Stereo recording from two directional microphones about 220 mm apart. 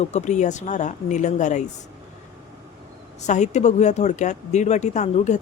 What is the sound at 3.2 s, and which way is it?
Speech, 30° left (ahead or behind).